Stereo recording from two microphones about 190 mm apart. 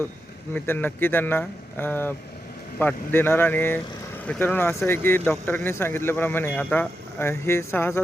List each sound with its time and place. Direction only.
0.5 s speech: 10° left (ahead or behind)